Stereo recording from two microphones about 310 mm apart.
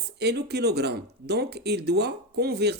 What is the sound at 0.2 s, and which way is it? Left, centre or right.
Speech, right.